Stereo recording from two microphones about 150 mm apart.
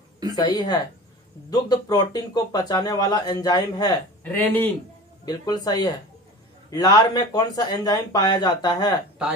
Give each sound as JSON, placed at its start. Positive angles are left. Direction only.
{"t": 0.4, "sound": "speech", "side_deg": 30}
{"t": 4.2, "sound": "speech", "side_deg": 10}
{"t": 5.2, "sound": "speech", "side_deg": 25}